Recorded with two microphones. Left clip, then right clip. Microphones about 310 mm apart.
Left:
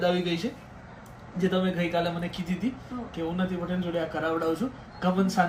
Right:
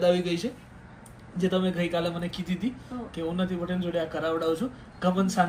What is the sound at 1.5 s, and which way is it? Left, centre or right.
A man's voice, centre.